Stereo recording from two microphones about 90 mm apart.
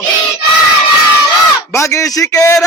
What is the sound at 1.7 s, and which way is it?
Speech, 35° left (ahead or behind).